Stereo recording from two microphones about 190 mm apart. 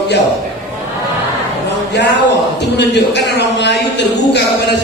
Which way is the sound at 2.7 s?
65° left (ahead or behind).